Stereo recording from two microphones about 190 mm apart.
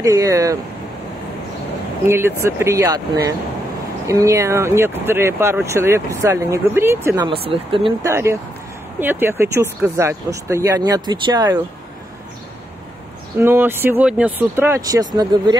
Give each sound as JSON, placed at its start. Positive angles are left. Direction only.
{"t": 0.0, "sound": "speech", "side_deg": -20}
{"t": 2.0, "sound": "speech", "side_deg": -15}
{"t": 7.2, "sound": "speech", "side_deg": -30}
{"t": 8.0, "sound": "speech", "side_deg": -15}
{"t": 13.4, "sound": "speech", "side_deg": -10}